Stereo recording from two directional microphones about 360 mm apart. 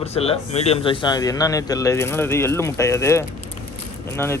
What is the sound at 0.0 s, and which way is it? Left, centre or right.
Speech, centre.